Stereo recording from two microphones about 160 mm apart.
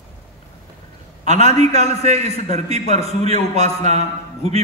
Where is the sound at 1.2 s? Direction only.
40° right (ahead or behind).